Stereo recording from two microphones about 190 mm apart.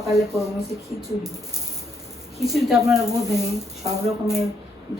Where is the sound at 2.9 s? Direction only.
15° right (ahead or behind).